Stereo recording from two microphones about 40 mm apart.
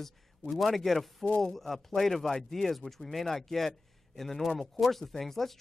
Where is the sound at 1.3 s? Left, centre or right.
Left.